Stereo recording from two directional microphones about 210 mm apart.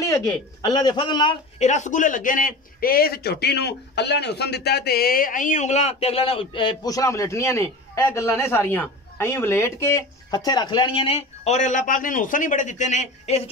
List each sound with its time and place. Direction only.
0.0 s a man's voice: 15° left (ahead or behind)
1.7 s a man's voice: 35° left (ahead or behind)